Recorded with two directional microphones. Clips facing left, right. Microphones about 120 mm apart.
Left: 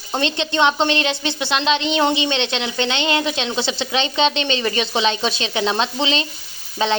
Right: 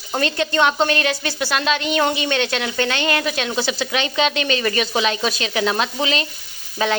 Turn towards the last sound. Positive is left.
turn(degrees=25)  # may be behind; listen again after turning